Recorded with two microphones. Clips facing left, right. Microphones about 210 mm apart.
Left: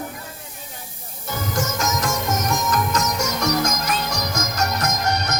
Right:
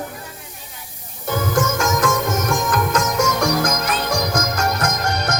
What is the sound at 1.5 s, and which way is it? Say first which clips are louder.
Music: right 4 dB; 55° right (ahead or behind).